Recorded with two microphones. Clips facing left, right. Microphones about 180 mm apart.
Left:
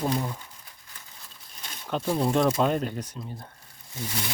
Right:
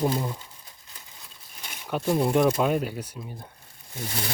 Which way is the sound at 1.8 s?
10° right (ahead or behind).